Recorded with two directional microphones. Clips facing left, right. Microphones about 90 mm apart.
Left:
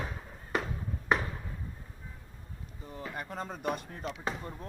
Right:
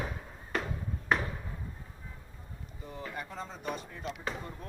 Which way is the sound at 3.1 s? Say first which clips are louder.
Left 5 dB; 45° left (ahead or behind).